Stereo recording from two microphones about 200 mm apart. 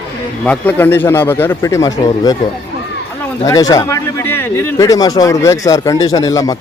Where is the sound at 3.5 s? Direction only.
15° left (ahead or behind).